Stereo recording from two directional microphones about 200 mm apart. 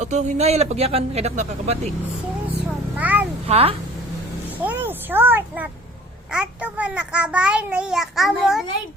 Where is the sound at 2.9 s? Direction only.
10° right (ahead or behind).